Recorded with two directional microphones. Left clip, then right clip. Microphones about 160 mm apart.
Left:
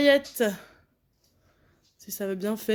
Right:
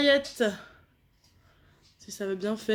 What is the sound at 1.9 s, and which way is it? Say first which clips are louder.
Speech: left 1 dB; 45° left (ahead or behind).